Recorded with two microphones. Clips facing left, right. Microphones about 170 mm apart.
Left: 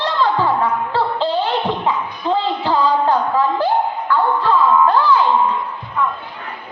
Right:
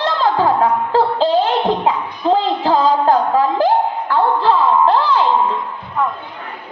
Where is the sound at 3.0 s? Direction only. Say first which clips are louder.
Right 2 dB; 40° right (ahead or behind).